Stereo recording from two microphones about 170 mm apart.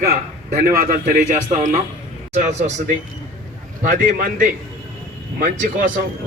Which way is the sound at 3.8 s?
55° right (ahead or behind).